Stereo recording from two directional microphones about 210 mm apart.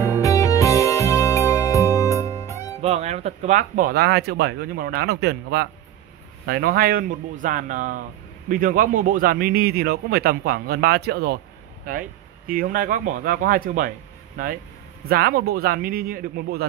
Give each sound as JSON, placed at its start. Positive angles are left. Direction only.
{"t": 0.2, "sound": "music", "side_deg": 15}
{"t": 2.8, "sound": "speech", "side_deg": -30}
{"t": 12.4, "sound": "speech", "side_deg": -40}